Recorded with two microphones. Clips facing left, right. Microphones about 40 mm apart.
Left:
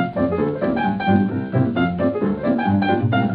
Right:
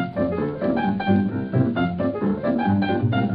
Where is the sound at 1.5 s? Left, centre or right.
Centre.